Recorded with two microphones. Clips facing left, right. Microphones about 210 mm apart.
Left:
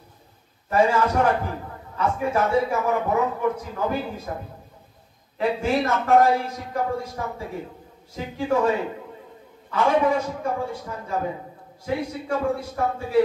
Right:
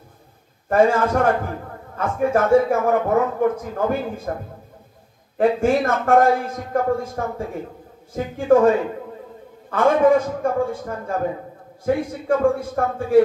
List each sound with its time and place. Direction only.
0.7 s a man's voice: 50° right (ahead or behind)
5.4 s a man's voice: 50° right (ahead or behind)